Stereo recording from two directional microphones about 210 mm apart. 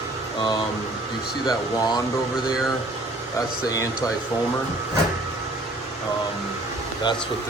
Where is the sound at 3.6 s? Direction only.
15° left (ahead or behind).